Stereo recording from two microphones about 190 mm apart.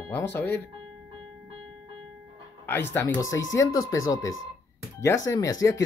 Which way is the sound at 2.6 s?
10° left (ahead or behind).